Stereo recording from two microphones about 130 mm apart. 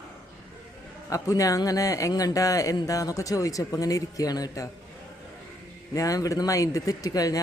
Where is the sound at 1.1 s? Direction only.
25° left (ahead or behind).